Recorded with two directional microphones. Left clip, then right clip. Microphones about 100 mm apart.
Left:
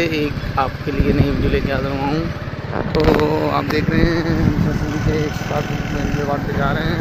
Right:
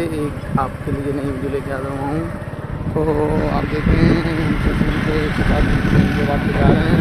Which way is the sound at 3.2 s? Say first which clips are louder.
Left 2 dB; 5° right (ahead or behind).